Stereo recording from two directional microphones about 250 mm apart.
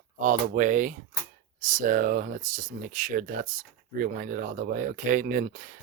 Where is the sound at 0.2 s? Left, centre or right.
Right.